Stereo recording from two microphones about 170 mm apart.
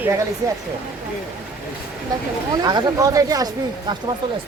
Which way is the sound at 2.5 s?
25° right (ahead or behind).